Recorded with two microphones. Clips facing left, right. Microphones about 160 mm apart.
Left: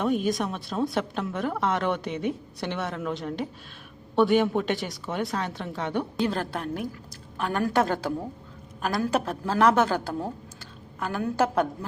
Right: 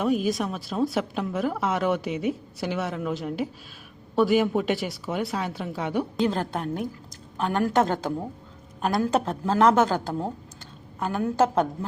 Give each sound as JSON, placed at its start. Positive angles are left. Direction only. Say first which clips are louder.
{"t": 0.0, "sound": "a woman's voice", "louder": "right 1 dB", "side_deg": -5}
{"t": 6.2, "sound": "a woman's voice", "louder": "right 2 dB", "side_deg": -20}